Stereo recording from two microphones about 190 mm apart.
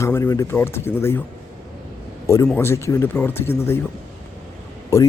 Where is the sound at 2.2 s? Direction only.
15° left (ahead or behind).